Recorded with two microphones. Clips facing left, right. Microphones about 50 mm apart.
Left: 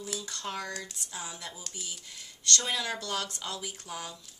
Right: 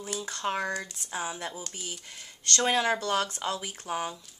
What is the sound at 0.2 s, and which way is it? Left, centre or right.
Speech, right.